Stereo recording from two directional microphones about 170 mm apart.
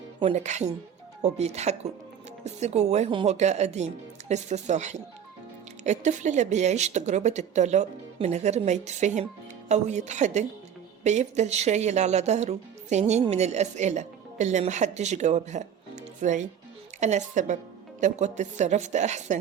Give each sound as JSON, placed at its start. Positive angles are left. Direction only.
{"t": 0.2, "sound": "speech", "side_deg": -40}